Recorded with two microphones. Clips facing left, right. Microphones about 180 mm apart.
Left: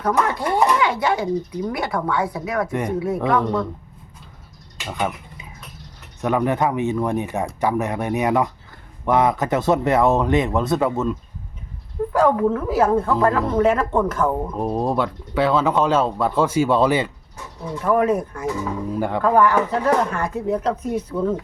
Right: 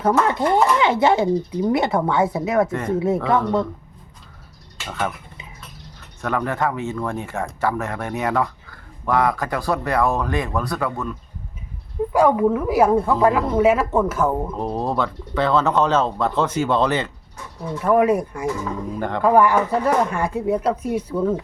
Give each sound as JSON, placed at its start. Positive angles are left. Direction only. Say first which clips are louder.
{"t": 0.3, "sound": "speech", "louder": "right 2 dB", "side_deg": -25}
{"t": 4.9, "sound": "speech", "louder": "left 1 dB", "side_deg": 15}
{"t": 6.2, "sound": "speech", "louder": "left 3 dB", "side_deg": 20}
{"t": 12.1, "sound": "a woman's voice", "louder": "right 1 dB", "side_deg": -10}
{"t": 14.5, "sound": "speech", "louder": "left 2 dB", "side_deg": 10}
{"t": 17.8, "sound": "a woman's voice", "louder": "right 2 dB", "side_deg": -10}
{"t": 18.9, "sound": "speech", "louder": "left 3 dB", "side_deg": 10}
{"t": 19.2, "sound": "a woman's voice", "louder": "right 2 dB", "side_deg": -10}